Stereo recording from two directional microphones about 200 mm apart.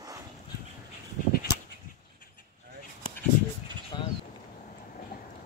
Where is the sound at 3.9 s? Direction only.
20° left (ahead or behind).